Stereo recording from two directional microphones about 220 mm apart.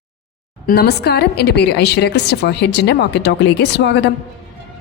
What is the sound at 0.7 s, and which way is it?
A woman's voice, 45° left (ahead or behind).